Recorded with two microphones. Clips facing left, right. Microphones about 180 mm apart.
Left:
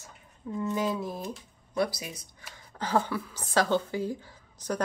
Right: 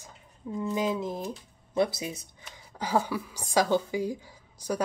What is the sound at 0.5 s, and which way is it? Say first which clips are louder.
Speech: right 1 dB; 15° right (ahead or behind).